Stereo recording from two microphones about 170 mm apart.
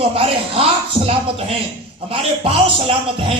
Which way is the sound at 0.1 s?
35° right (ahead or behind).